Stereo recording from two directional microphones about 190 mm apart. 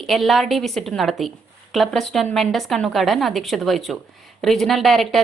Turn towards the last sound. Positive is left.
turn(degrees=0)  # may be behind; listen again after turning